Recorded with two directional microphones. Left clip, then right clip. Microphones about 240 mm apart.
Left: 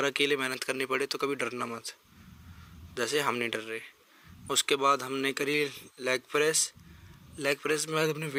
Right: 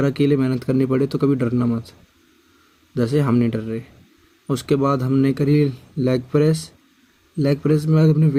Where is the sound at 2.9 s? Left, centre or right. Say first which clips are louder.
Right 9 dB; left.